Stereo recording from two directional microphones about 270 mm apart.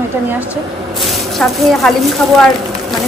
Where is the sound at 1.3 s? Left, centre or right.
Centre.